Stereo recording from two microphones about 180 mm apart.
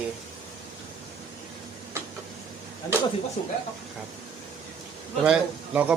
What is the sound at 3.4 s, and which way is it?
Speech, 35° left (ahead or behind).